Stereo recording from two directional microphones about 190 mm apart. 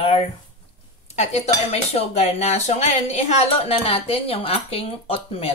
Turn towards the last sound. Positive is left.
turn(degrees=30)  # may be behind; listen again after turning